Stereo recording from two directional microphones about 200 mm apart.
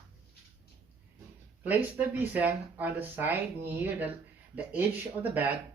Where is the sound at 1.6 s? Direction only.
10° right (ahead or behind).